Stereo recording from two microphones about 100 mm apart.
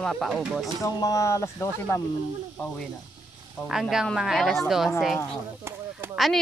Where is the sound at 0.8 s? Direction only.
35° left (ahead or behind).